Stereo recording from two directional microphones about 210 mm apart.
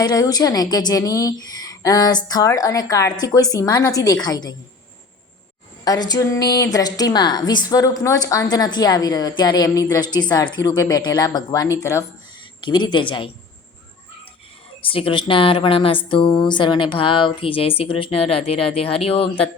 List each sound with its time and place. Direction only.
0.0 s a woman's voice: 20° left (ahead or behind)
5.8 s a woman's voice: 20° left (ahead or behind)
14.8 s a woman's voice: 25° left (ahead or behind)